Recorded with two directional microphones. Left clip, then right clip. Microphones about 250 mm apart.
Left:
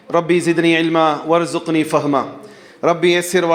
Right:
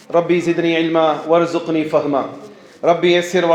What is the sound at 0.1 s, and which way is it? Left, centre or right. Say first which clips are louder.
A man's voice: even; left.